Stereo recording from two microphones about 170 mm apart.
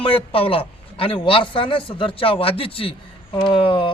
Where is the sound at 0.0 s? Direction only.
30° left (ahead or behind).